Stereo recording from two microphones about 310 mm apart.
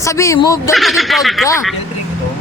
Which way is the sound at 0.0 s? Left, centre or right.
Centre.